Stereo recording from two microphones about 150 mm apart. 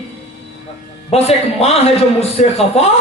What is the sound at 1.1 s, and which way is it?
Speech, 45° left (ahead or behind).